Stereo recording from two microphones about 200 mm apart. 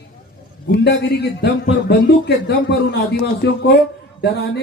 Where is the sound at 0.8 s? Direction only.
55° left (ahead or behind).